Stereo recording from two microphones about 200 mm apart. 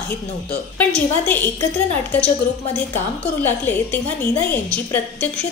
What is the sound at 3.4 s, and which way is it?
A woman's voice, 10° left (ahead or behind).